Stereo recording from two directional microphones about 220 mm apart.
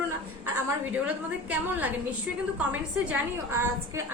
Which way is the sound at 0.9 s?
5° right (ahead or behind).